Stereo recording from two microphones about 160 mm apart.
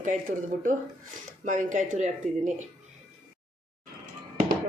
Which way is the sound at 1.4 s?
50° right (ahead or behind).